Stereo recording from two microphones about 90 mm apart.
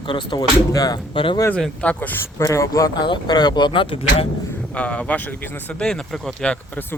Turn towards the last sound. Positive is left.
turn(degrees=10)  # may be behind; listen again after turning